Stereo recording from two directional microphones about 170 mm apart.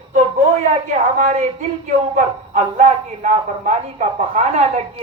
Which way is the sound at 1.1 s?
45° right (ahead or behind).